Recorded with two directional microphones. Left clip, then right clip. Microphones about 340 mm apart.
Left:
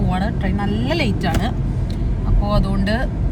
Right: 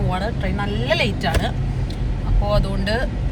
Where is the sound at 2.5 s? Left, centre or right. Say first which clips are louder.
Even; centre.